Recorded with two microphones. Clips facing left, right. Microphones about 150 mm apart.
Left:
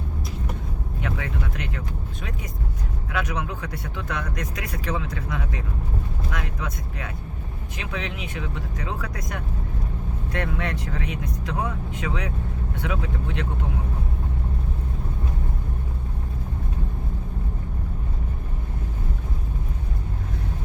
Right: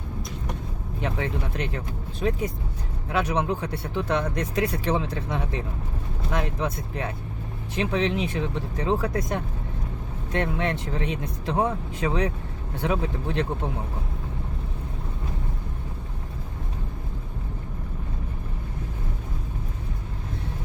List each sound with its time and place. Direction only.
1.0 s speech: 30° right (ahead or behind)